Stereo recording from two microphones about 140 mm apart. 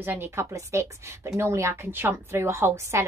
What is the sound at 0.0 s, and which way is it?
Speech, 15° right (ahead or behind).